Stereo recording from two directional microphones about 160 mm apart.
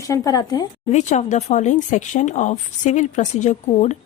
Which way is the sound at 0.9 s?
45° left (ahead or behind).